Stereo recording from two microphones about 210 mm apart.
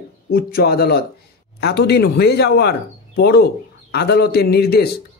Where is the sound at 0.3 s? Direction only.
45° left (ahead or behind).